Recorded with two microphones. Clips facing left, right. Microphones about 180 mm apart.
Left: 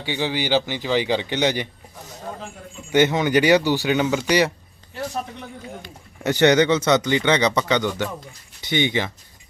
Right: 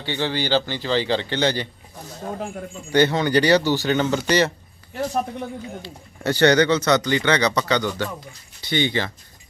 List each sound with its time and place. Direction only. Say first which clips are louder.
0.0 s a man's voice: even; 10° left (ahead or behind)
2.9 s a man's voice: even; 15° left (ahead or behind)
6.2 s a man's voice: even; 20° left (ahead or behind)